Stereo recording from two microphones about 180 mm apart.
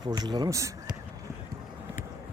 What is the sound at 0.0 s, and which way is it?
Speech, 20° right (ahead or behind).